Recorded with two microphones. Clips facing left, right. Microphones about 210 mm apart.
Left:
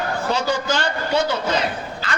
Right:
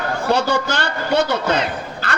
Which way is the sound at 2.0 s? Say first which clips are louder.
Right 3 dB; 65° right (ahead or behind).